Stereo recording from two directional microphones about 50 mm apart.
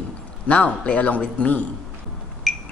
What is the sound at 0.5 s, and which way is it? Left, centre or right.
A man's voice, left.